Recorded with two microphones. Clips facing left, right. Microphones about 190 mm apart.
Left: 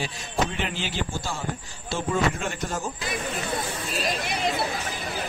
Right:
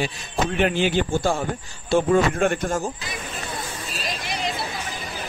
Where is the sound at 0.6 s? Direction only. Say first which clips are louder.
Right 10 dB; 60° right (ahead or behind).